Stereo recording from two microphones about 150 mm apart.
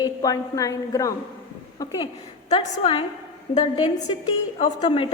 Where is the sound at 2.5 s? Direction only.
40° left (ahead or behind).